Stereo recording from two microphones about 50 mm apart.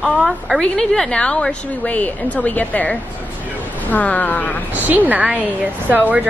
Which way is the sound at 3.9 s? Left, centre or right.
Left.